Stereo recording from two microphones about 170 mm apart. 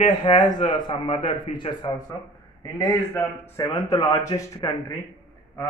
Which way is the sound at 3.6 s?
25° left (ahead or behind).